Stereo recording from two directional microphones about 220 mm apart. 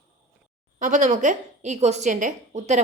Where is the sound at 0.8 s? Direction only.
35° right (ahead or behind).